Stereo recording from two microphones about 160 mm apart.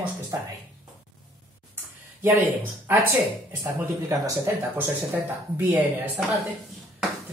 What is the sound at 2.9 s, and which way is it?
Speech, 15° right (ahead or behind).